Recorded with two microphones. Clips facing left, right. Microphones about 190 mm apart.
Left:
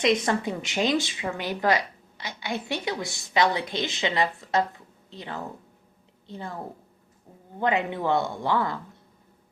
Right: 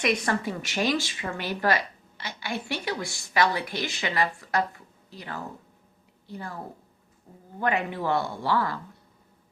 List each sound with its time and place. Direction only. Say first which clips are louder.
0.0 s a woman's voice: left 3 dB; 20° left (ahead or behind)
7.6 s speech: left 2 dB; 20° left (ahead or behind)